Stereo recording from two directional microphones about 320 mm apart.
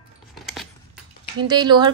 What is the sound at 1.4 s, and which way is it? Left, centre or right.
Speech, centre.